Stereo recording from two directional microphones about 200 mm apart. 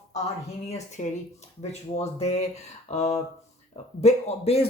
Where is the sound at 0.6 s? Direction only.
35° left (ahead or behind).